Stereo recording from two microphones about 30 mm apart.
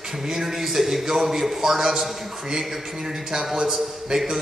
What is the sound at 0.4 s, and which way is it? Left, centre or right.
A man's voice, centre.